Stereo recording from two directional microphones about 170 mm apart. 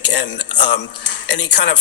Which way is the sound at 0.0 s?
90° left.